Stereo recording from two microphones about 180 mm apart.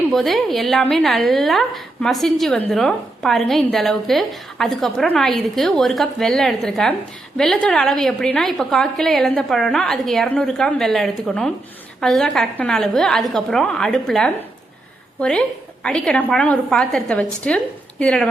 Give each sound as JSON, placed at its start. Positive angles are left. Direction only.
{"t": 0.1, "sound": "a woman's voice", "side_deg": 0}